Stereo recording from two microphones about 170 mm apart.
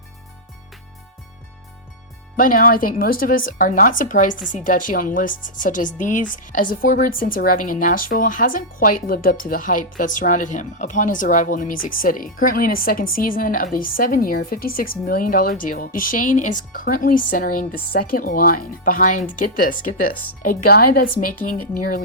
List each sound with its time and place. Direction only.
2.3 s a woman's voice: 55° left (ahead or behind)